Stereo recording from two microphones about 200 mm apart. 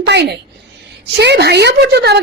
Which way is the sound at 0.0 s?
55° right (ahead or behind).